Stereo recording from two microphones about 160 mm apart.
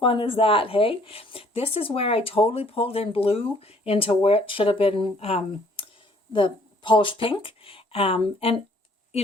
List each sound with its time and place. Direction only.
0.0 s speech: 35° left (ahead or behind)